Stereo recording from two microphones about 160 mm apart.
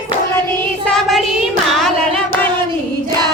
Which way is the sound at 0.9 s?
Centre (ahead or behind).